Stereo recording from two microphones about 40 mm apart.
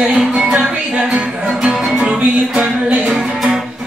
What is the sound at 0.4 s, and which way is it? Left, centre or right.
Music, right.